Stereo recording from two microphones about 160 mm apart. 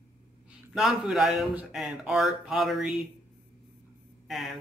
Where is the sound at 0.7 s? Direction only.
Centre (ahead or behind).